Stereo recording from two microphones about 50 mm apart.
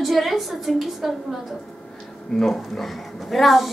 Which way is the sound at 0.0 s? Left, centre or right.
Centre.